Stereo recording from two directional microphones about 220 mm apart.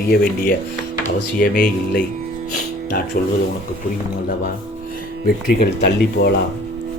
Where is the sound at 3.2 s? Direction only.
40° left (ahead or behind).